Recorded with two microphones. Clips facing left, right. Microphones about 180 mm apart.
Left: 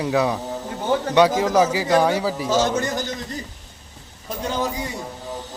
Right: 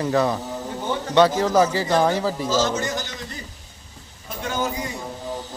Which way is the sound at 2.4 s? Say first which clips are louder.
Left 4 dB; 60° left (ahead or behind).